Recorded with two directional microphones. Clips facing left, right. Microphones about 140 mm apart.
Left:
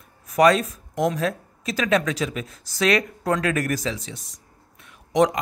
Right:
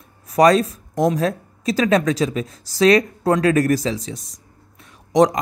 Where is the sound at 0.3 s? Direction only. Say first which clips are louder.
Right 3 dB; 35° right (ahead or behind).